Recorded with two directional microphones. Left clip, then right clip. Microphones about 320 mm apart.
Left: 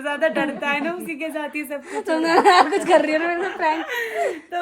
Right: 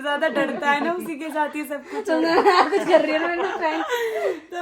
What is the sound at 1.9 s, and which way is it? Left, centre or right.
Speech, left.